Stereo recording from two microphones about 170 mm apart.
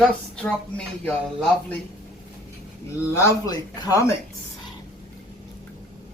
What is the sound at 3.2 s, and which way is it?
Speech, 20° left (ahead or behind).